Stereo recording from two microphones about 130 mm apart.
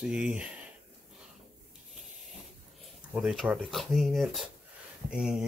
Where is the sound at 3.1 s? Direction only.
Centre (ahead or behind).